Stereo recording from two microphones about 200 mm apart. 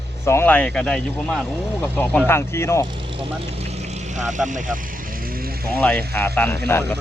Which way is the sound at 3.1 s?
30° right (ahead or behind).